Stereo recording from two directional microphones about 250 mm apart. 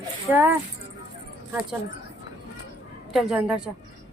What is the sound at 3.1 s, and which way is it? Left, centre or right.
Speech, centre.